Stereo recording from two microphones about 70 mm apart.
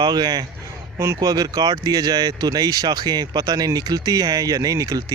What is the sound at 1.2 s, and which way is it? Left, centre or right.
Speech, right.